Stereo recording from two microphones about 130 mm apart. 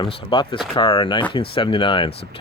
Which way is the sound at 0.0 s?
40° left (ahead or behind).